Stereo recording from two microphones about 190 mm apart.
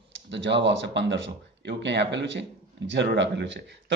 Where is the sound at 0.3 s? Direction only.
70° right (ahead or behind).